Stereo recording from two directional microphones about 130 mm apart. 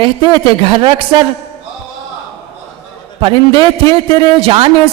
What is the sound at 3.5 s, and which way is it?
Speech, 30° left (ahead or behind).